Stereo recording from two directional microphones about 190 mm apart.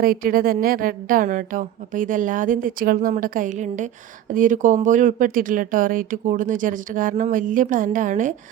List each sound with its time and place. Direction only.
0.0 s speech: 50° right (ahead or behind)